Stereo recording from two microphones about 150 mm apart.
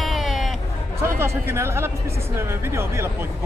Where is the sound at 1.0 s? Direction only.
15° right (ahead or behind).